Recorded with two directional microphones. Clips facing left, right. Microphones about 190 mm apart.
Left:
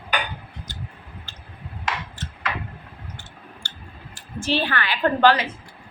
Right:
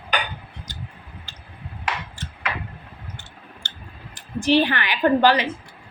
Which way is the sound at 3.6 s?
20° right (ahead or behind).